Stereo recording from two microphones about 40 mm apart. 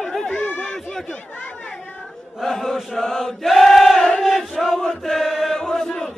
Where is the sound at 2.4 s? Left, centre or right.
Centre.